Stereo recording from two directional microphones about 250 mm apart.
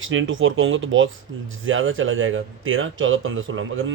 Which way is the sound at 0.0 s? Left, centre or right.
Right.